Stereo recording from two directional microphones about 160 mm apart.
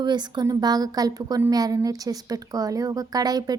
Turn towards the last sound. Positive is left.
turn(degrees=-25)  # may be behind; listen again after turning